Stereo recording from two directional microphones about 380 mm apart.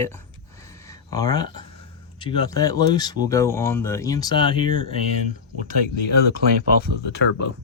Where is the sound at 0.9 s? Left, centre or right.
Centre.